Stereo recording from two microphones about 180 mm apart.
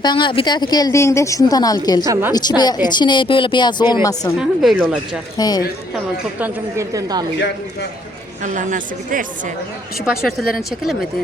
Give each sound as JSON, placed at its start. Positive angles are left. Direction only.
{"t": 0.0, "sound": "a woman's voice", "side_deg": 25}
{"t": 4.4, "sound": "speech", "side_deg": -5}
{"t": 5.4, "sound": "a woman's voice", "side_deg": 20}
{"t": 6.4, "sound": "a woman's voice", "side_deg": -15}
{"t": 8.5, "sound": "a woman's voice", "side_deg": -45}
{"t": 10.1, "sound": "speech", "side_deg": 0}